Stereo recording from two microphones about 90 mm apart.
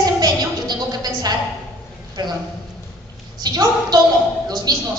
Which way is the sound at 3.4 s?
50° right (ahead or behind).